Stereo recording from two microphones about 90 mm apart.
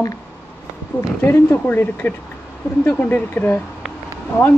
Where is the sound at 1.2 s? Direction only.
25° left (ahead or behind).